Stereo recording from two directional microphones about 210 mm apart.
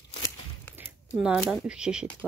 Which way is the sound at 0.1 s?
15° left (ahead or behind).